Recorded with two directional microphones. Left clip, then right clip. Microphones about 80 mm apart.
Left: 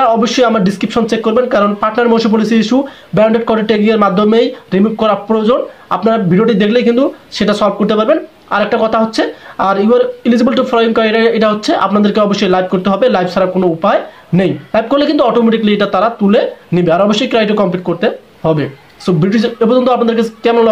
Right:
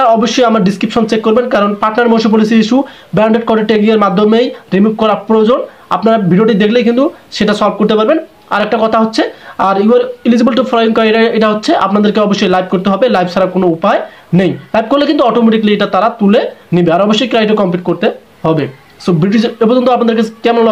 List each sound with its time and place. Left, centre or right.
0.0 s speech: right